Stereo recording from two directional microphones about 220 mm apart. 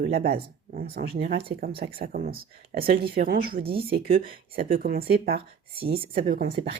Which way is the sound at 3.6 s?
25° right (ahead or behind).